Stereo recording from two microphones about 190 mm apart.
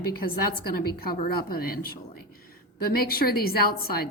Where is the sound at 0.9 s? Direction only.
50° left (ahead or behind).